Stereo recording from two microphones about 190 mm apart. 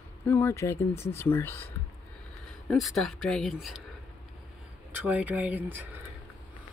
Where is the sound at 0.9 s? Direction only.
35° left (ahead or behind).